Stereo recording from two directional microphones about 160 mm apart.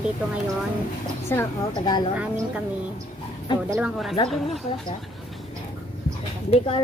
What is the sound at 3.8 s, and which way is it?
Speech, centre (ahead or behind).